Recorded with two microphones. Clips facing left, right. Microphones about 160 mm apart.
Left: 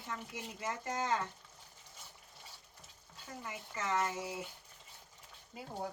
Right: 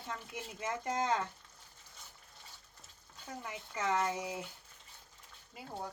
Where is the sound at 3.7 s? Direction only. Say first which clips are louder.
Right 2 dB; 15° right (ahead or behind).